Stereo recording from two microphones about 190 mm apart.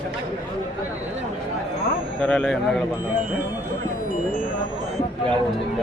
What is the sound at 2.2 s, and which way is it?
Speech, 5° left (ahead or behind).